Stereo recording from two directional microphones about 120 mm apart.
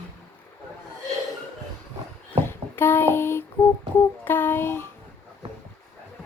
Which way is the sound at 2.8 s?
20° left (ahead or behind).